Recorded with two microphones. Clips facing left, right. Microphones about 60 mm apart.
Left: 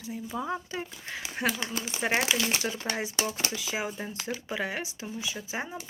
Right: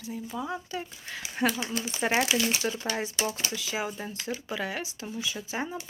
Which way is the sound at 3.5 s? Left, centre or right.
Centre.